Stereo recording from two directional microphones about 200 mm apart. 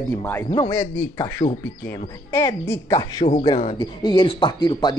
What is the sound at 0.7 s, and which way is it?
Speech, 10° left (ahead or behind).